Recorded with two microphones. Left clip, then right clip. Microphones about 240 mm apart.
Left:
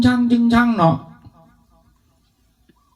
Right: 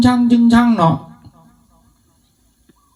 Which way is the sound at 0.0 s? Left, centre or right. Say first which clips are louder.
Right 4 dB; right.